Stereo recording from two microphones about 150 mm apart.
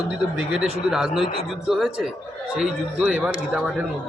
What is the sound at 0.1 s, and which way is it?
A man's voice, 5° right (ahead or behind).